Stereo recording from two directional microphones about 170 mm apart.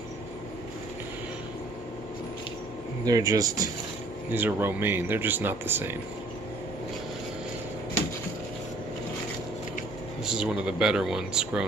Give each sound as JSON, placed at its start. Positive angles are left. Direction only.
{"t": 3.1, "sound": "speech", "side_deg": -20}
{"t": 10.2, "sound": "speech", "side_deg": -5}